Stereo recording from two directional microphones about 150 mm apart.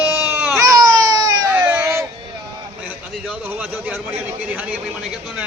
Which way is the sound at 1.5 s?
15° right (ahead or behind).